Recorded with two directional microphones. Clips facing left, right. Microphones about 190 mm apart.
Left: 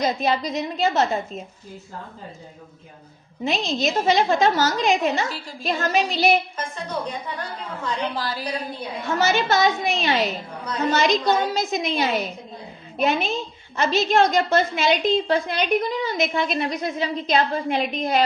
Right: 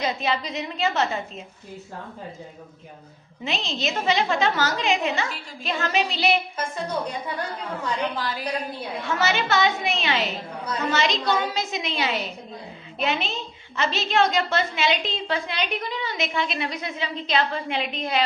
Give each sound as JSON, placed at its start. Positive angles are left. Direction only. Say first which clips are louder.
{"t": 0.0, "sound": "a woman's voice", "louder": "left 4 dB", "side_deg": 40}
{"t": 3.4, "sound": "a woman's voice", "louder": "left 5 dB", "side_deg": 45}
{"t": 8.1, "sound": "a woman's voice", "louder": "left 1 dB", "side_deg": 35}